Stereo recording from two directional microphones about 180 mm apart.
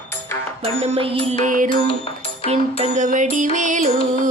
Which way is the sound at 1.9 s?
30° left (ahead or behind).